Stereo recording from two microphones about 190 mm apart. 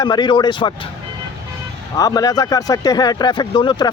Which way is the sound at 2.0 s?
20° left (ahead or behind).